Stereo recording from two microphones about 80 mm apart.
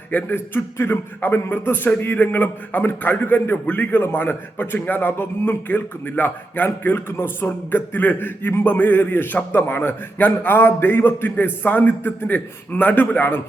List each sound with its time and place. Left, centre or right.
0.1 s a man's voice: left